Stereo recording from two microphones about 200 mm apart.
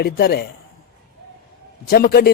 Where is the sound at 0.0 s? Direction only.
50° left (ahead or behind).